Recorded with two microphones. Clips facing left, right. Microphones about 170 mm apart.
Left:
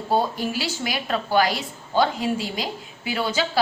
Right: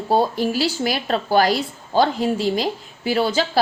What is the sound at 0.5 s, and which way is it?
A woman's voice, 35° right (ahead or behind).